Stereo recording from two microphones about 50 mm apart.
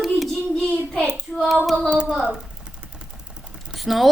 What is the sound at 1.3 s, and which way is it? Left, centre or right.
Speech, centre.